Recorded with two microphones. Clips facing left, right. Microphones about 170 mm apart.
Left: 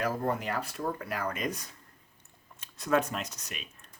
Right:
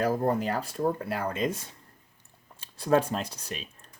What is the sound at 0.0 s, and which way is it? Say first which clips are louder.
Speech: right 5 dB; 35° right (ahead or behind).